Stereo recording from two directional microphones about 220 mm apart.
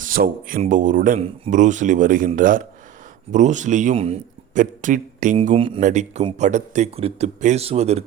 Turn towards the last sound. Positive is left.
turn(degrees=-30)  # may be behind; listen again after turning